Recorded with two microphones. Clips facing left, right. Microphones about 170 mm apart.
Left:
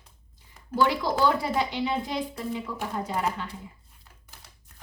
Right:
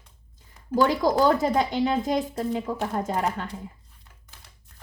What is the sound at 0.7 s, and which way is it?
Speech, 45° right (ahead or behind).